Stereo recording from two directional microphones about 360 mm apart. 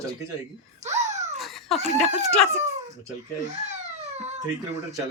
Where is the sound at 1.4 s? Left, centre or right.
Centre.